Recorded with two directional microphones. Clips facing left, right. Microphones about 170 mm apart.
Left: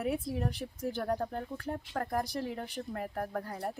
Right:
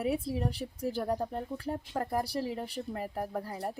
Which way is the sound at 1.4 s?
30° right (ahead or behind).